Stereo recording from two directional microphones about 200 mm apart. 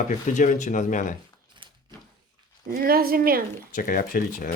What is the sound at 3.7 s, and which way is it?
Speech, 45° left (ahead or behind).